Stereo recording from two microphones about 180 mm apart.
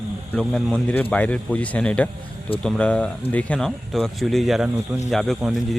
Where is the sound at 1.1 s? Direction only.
5° left (ahead or behind).